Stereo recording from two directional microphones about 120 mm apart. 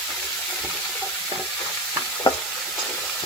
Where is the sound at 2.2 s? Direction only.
40° left (ahead or behind).